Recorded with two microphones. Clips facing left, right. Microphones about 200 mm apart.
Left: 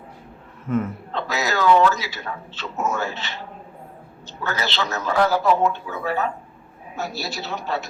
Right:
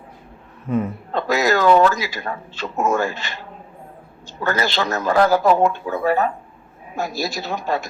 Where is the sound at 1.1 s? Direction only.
45° right (ahead or behind).